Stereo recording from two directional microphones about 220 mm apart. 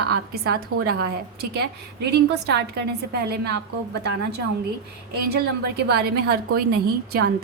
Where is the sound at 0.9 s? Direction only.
45° right (ahead or behind).